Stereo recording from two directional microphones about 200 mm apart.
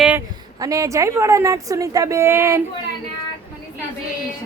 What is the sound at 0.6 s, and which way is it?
A woman's voice, 15° right (ahead or behind).